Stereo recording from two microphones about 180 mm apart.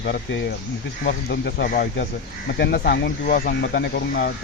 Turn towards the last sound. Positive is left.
turn(degrees=65)  # may be behind; listen again after turning